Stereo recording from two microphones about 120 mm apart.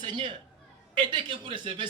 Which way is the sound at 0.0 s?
45° right (ahead or behind).